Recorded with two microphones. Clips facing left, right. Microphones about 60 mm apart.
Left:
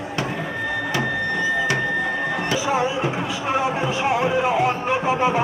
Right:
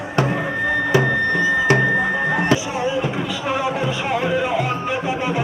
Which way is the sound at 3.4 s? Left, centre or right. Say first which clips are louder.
Even; left.